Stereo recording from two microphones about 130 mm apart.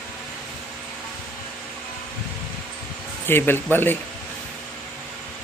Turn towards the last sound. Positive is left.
turn(degrees=15)  # may be behind; listen again after turning